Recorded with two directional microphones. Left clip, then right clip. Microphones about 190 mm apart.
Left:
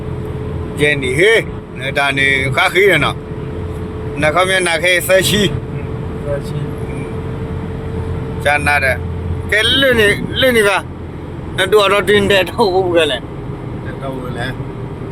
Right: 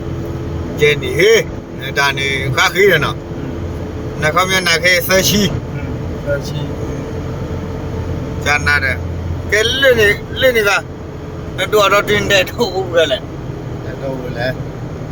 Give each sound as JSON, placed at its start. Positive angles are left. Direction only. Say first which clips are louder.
{"t": 0.8, "sound": "speech", "louder": "even", "side_deg": 40}
{"t": 4.2, "sound": "speech", "louder": "left 1 dB", "side_deg": 45}
{"t": 8.4, "sound": "speech", "louder": "left 1 dB", "side_deg": 45}